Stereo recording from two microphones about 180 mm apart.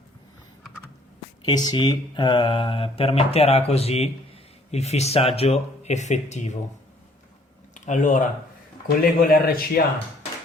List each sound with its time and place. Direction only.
1.5 s speech: 25° left (ahead or behind); by 6.6 s 40° left (ahead or behind)
7.7 s speech: 45° left (ahead or behind)
9.0 s a man's voice: 55° left (ahead or behind)